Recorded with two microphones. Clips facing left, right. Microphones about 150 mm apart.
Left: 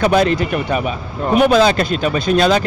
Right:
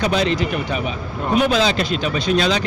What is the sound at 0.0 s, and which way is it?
Speech, 50° left (ahead or behind).